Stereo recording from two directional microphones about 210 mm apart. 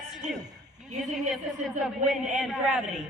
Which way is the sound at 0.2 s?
35° right (ahead or behind).